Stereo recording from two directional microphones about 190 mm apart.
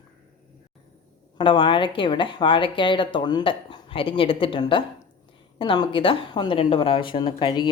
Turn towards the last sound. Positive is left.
turn(degrees=25)  # may be behind; listen again after turning